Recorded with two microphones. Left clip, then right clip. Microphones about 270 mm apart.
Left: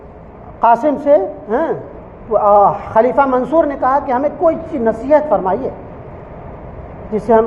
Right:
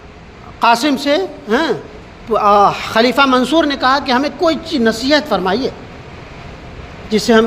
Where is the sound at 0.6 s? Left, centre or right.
Right.